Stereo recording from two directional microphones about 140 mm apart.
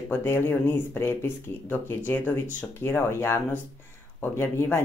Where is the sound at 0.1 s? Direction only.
15° left (ahead or behind).